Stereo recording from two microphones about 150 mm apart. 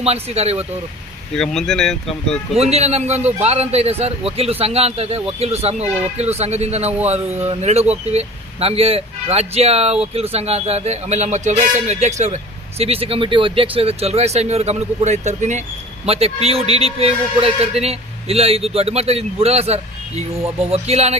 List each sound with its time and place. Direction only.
0.0 s speech: 45° right (ahead or behind)
1.4 s speech: 5° left (ahead or behind)
2.6 s speech: 45° right (ahead or behind)